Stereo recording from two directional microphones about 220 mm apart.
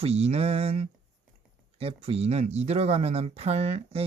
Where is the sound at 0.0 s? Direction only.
25° right (ahead or behind).